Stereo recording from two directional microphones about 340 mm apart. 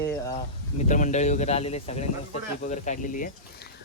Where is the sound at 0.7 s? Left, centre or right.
Left.